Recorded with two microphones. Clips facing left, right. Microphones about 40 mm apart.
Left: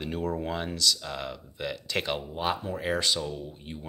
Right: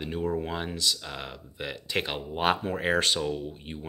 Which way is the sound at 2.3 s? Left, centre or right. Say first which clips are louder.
Right 8 dB; right.